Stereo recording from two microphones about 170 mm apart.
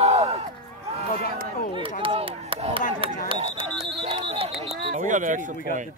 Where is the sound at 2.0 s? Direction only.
35° right (ahead or behind); by 5.5 s 50° right (ahead or behind).